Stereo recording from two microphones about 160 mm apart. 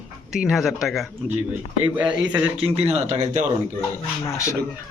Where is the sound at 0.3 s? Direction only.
Centre (ahead or behind).